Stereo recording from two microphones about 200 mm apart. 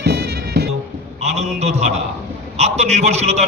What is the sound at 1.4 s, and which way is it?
A man's voice, 35° right (ahead or behind).